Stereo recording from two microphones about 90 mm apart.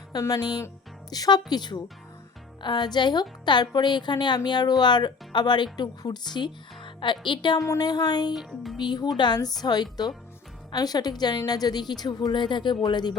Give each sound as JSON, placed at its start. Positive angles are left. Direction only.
{"t": 0.1, "sound": "a woman's voice", "side_deg": 45}
{"t": 7.7, "sound": "a woman's voice", "side_deg": 45}
{"t": 8.4, "sound": "music", "side_deg": 0}
{"t": 8.8, "sound": "a woman's voice", "side_deg": 50}